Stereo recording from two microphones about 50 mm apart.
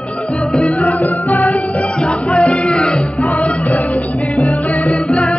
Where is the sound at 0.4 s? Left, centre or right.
Centre.